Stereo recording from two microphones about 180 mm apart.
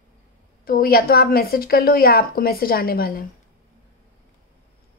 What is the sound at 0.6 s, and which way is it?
A woman's voice, 55° left (ahead or behind).